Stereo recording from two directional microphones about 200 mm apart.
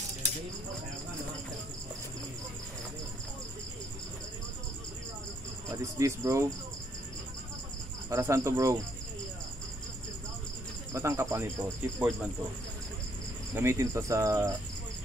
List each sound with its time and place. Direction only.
5.7 s speech: 15° right (ahead or behind)
8.1 s speech: 15° right (ahead or behind)
10.9 s speech: 15° right (ahead or behind)
13.6 s speech: 15° right (ahead or behind)